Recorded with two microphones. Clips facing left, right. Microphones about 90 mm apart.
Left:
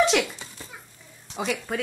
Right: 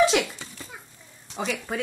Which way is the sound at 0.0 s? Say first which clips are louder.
Right 1 dB; centre (ahead or behind).